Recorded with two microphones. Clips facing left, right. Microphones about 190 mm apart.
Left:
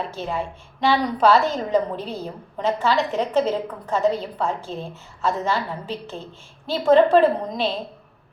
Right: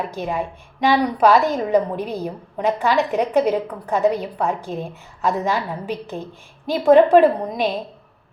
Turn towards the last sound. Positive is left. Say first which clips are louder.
# right 2 dB
turn(degrees=-15)  # may be behind; listen again after turning